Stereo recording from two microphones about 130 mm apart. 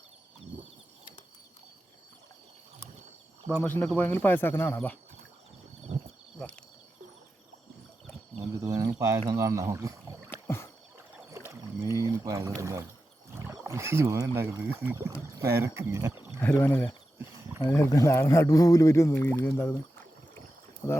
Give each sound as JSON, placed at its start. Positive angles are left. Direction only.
{"t": 3.6, "sound": "speech", "side_deg": 10}
{"t": 8.6, "sound": "a sound", "side_deg": -25}
{"t": 9.2, "sound": "speech", "side_deg": -25}
{"t": 10.2, "sound": "rowboat", "side_deg": 20}
{"t": 10.9, "sound": "boat", "side_deg": -20}
{"t": 13.3, "sound": "speech", "side_deg": -25}
{"t": 16.6, "sound": "speech", "side_deg": 15}
{"t": 20.8, "sound": "speech", "side_deg": 25}